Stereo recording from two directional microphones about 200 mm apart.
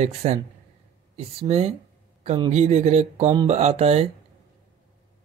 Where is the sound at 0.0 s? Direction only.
30° right (ahead or behind).